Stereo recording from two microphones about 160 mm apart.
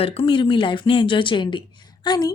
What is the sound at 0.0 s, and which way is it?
A woman's voice, 35° left (ahead or behind).